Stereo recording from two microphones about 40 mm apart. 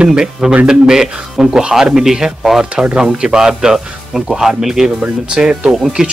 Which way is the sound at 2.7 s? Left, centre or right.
Right.